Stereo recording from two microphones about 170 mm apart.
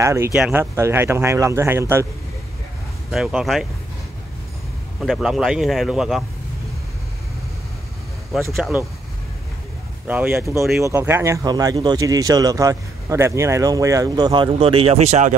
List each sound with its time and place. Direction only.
0.0 s speech: 15° right (ahead or behind)
3.1 s speech: 5° right (ahead or behind)
5.0 s speech: centre (ahead or behind)
8.3 s speech: centre (ahead or behind)
10.0 s speech: 10° right (ahead or behind); by 15.3 s 40° right (ahead or behind)